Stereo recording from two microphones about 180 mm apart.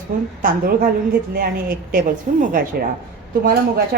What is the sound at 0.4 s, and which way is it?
A woman's voice, 50° right (ahead or behind).